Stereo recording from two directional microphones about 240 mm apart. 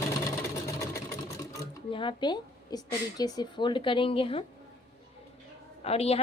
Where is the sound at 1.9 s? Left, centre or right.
Centre.